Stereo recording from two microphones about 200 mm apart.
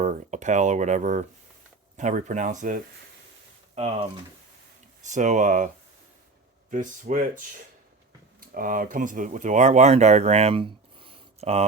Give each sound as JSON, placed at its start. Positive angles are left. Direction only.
{"t": 0.0, "sound": "speech", "side_deg": -35}
{"t": 8.5, "sound": "speech", "side_deg": -40}